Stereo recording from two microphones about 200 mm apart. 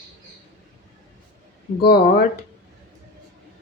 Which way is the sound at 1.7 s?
50° left (ahead or behind).